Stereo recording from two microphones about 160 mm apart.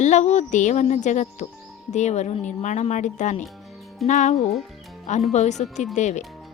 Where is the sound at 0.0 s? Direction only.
45° left (ahead or behind).